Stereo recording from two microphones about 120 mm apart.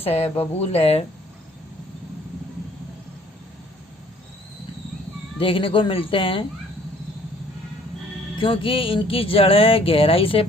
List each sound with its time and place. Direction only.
0.0 s speech: 55° left (ahead or behind)
5.4 s speech: 50° left (ahead or behind)
8.4 s speech: 45° left (ahead or behind)